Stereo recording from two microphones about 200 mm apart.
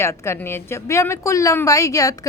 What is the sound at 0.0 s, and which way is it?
Speech, 15° left (ahead or behind).